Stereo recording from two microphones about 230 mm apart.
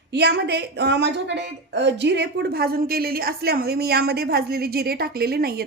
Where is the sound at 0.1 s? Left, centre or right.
Right.